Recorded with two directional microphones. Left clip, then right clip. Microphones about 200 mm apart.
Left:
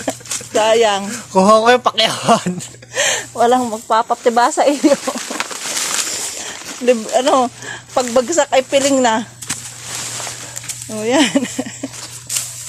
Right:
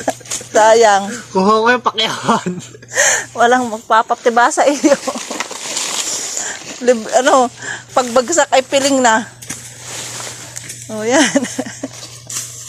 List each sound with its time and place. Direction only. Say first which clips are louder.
0.0 s a sound: right 3 dB; centre (ahead or behind)
1.3 s speech: left 2 dB; 55° left (ahead or behind)
2.9 s speech: right 3 dB; centre (ahead or behind)
6.1 s a sound: right 2 dB; centre (ahead or behind)
8.1 s speech: right 1 dB; centre (ahead or behind)
10.9 s speech: right 2 dB; centre (ahead or behind)